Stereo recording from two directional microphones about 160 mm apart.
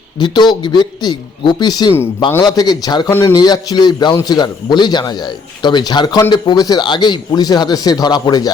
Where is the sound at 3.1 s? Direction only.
15° left (ahead or behind).